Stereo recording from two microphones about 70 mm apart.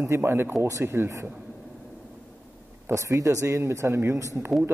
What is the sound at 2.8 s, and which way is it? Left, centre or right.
Speech, right.